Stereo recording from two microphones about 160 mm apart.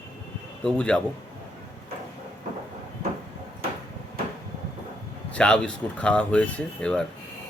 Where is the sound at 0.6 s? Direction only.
5° left (ahead or behind).